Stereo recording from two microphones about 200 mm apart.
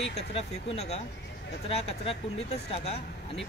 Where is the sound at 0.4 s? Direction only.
30° left (ahead or behind).